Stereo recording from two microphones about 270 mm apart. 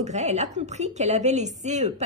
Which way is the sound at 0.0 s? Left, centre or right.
Right.